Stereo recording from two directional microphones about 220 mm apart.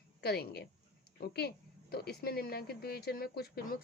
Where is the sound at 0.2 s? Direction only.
45° left (ahead or behind).